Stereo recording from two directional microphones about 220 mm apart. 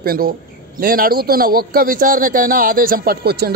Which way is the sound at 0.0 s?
40° right (ahead or behind).